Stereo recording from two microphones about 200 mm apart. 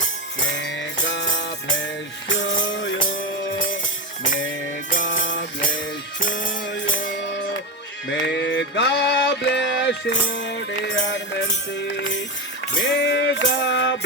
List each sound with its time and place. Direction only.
0.5 s music: 65° left (ahead or behind)
2.6 s music: 65° left (ahead or behind)
8.0 s music: 65° left (ahead or behind)